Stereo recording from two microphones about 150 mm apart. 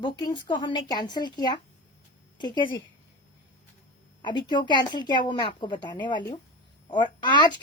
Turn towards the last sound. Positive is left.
turn(degrees=30)  # may be behind; listen again after turning